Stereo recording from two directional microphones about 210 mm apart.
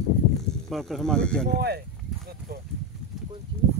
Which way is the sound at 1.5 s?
50° right (ahead or behind).